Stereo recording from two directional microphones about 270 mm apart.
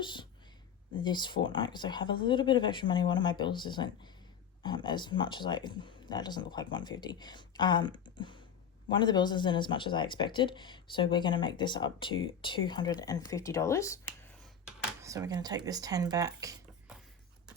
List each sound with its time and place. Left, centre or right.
0.0 s a sound: centre
1.0 s speech: centre
15.0 s speech: centre